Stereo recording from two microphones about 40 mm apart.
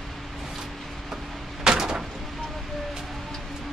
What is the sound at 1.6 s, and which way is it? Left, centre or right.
Door, centre.